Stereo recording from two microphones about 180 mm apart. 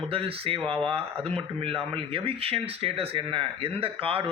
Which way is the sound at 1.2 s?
5° left (ahead or behind).